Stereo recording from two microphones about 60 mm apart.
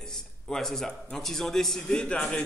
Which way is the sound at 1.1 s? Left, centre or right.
Centre.